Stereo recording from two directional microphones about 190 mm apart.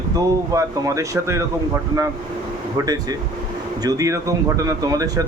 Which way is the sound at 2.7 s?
20° right (ahead or behind).